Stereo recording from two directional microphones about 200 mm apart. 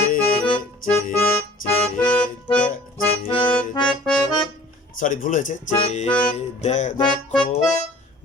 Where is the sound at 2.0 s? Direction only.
25° left (ahead or behind).